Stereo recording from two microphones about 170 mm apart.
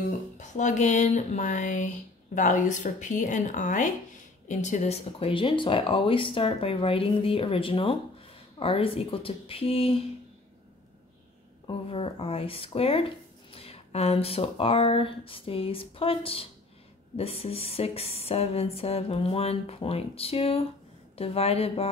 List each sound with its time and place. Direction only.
0.4 s speech: 45° left (ahead or behind)
11.6 s speech: 35° left (ahead or behind)